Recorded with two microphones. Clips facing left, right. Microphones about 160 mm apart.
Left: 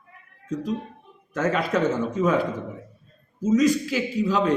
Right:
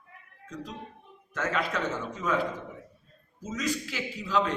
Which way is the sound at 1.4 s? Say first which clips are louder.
Left 7 dB; 40° left (ahead or behind).